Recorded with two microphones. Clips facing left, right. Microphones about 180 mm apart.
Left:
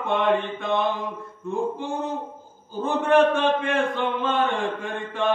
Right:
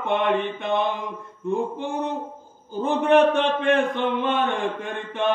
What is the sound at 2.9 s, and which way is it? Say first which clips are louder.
Speech: right 1 dB; 20° right (ahead or behind).